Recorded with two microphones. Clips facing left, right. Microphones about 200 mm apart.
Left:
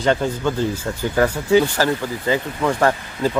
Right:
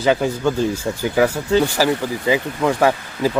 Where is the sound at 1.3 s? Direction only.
10° left (ahead or behind).